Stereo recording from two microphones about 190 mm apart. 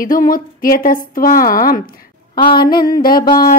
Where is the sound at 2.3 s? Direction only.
25° left (ahead or behind).